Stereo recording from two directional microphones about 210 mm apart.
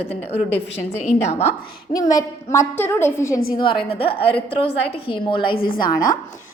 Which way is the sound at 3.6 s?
25° left (ahead or behind).